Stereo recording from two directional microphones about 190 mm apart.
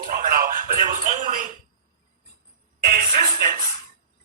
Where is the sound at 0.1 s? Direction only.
50° right (ahead or behind).